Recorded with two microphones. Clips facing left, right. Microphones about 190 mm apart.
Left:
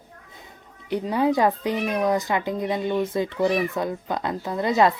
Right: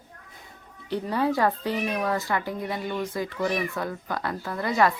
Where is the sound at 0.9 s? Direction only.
15° left (ahead or behind).